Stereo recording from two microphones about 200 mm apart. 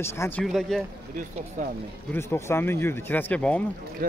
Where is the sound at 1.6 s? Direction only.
40° right (ahead or behind).